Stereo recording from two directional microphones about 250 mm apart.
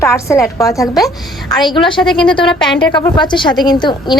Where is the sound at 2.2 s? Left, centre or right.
Centre.